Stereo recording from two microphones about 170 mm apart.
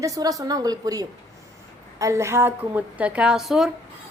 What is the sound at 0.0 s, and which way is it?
A woman's voice, 20° right (ahead or behind).